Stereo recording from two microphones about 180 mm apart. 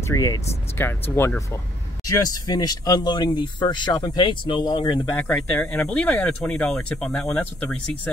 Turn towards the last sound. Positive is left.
turn(degrees=5)  # may be behind; listen again after turning